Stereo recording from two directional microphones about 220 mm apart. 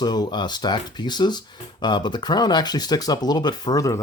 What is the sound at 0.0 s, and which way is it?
Speech, 20° left (ahead or behind).